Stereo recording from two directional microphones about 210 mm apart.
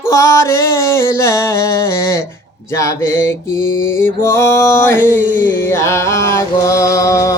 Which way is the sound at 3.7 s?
70° left (ahead or behind).